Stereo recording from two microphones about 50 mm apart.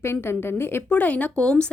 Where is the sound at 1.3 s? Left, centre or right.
Centre.